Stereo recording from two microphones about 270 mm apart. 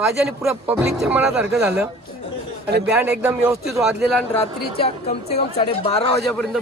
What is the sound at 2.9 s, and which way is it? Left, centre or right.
Speech, centre.